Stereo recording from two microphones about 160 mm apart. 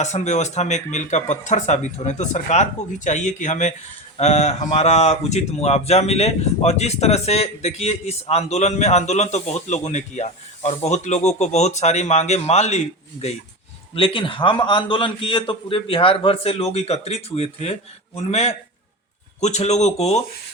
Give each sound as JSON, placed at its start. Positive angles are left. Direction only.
{"t": 0.0, "sound": "a man's voice", "side_deg": 45}